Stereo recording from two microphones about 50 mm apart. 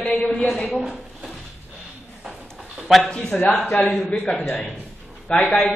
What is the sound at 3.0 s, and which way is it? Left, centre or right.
A man's voice, left.